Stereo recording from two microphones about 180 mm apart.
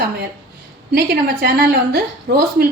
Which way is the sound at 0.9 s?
60° right (ahead or behind).